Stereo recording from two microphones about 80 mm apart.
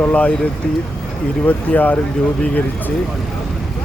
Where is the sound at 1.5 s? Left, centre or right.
Left.